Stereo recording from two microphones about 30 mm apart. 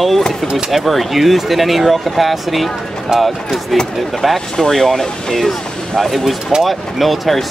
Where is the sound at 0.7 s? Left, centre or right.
Centre.